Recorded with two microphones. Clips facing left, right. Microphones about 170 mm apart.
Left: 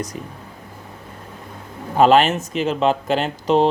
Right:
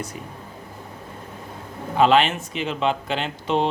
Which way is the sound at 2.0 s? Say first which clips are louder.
Left 4 dB; 45° left (ahead or behind).